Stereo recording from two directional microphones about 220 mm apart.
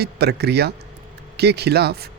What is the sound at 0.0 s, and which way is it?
Speech, 45° right (ahead or behind).